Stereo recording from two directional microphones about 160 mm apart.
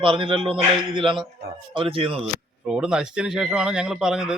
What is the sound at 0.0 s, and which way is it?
Speech, 35° right (ahead or behind).